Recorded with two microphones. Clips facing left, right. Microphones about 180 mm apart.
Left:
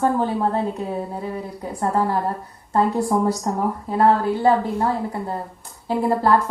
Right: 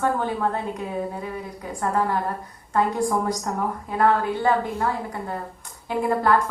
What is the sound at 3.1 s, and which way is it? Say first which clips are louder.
A woman's voice: left 4 dB; 25° left (ahead or behind).